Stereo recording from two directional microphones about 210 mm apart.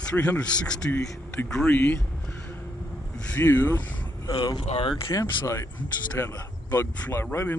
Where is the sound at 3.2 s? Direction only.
10° left (ahead or behind).